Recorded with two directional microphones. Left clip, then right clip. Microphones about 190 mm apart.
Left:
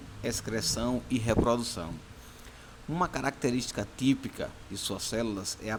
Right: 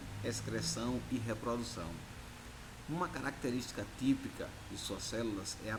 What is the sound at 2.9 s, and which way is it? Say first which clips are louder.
Speech: left 9 dB; 40° left (ahead or behind).